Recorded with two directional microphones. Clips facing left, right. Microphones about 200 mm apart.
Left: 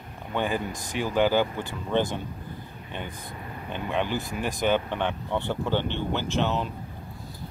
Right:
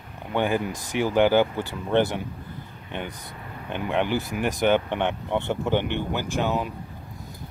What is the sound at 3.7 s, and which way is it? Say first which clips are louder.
Speech: right 3 dB; 15° right (ahead or behind).